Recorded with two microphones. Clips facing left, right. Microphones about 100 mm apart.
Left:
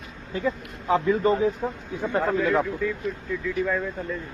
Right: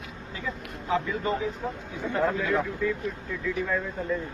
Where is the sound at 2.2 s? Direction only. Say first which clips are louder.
Left 3 dB; centre (ahead or behind).